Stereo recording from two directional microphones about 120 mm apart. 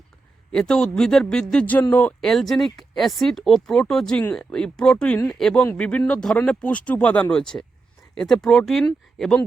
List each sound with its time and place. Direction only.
0.5 s speech: 5° left (ahead or behind)